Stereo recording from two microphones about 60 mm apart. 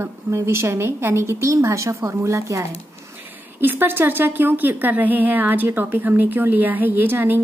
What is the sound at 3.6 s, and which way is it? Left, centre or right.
A woman's voice, right.